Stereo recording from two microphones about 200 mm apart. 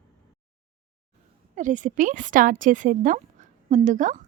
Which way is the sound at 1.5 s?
40° right (ahead or behind).